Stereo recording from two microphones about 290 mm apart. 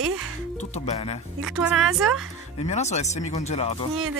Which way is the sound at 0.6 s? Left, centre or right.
Left.